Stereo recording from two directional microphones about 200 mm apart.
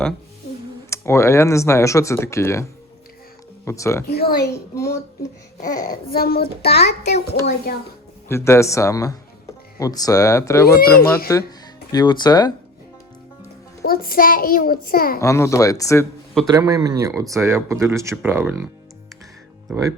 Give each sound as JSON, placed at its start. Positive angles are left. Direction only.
{"t": 0.9, "sound": "speech", "side_deg": 15}
{"t": 3.7, "sound": "speech", "side_deg": 15}
{"t": 4.1, "sound": "a child's voice", "side_deg": 50}
{"t": 4.5, "sound": "speech", "side_deg": 15}
{"t": 5.7, "sound": "a child's voice", "side_deg": 45}
{"t": 8.3, "sound": "speech", "side_deg": 15}
{"t": 10.8, "sound": "a child's voice", "side_deg": 50}
{"t": 11.3, "sound": "speech", "side_deg": 15}
{"t": 13.8, "sound": "a child's voice", "side_deg": 50}
{"t": 15.2, "sound": "speech", "side_deg": 15}
{"t": 16.5, "sound": "speech", "side_deg": -20}